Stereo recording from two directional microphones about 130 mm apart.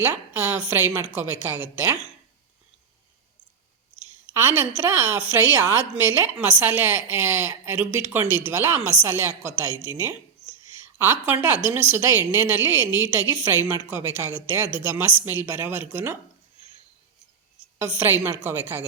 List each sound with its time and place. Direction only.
0.0 s a woman's voice: 15° right (ahead or behind)
4.0 s a sound: 20° right (ahead or behind)
4.8 s a woman's voice: 20° right (ahead or behind)
17.7 s a woman's voice: 15° right (ahead or behind)